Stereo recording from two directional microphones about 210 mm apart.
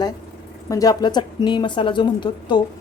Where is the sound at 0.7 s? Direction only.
15° left (ahead or behind).